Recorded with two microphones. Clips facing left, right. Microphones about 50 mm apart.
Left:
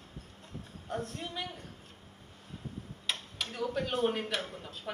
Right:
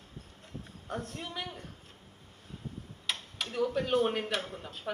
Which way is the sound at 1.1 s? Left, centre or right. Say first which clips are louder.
Even; right.